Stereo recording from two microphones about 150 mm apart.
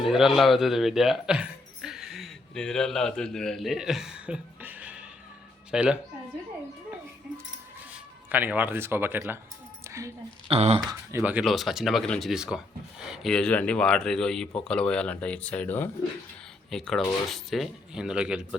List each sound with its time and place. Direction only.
0.0 s speech: centre (ahead or behind)
8.3 s speech: 10° right (ahead or behind)
10.5 s speech: 45° right (ahead or behind)
11.1 s speech: 10° right (ahead or behind)